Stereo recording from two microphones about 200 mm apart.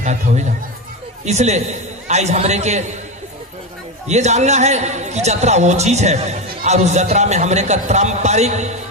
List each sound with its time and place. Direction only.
0.0 s a man's voice: 35° right (ahead or behind)
4.1 s a man's voice: 35° right (ahead or behind)